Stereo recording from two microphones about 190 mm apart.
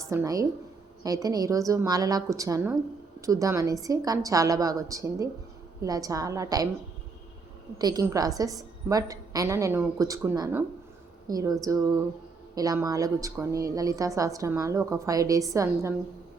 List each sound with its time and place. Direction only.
0.1 s a woman's voice: 15° right (ahead or behind)
7.8 s a woman's voice: 20° right (ahead or behind)